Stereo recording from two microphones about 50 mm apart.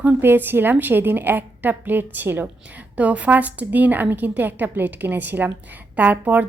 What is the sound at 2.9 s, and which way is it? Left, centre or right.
A woman's voice, right.